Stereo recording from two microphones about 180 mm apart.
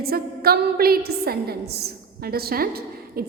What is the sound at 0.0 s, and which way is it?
A woman's voice, 60° right (ahead or behind).